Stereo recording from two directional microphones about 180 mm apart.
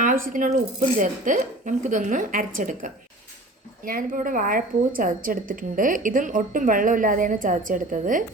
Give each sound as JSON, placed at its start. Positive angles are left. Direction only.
{"t": 0.0, "sound": "a woman's voice", "side_deg": -50}